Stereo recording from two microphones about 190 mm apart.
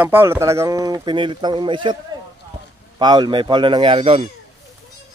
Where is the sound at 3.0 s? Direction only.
20° right (ahead or behind).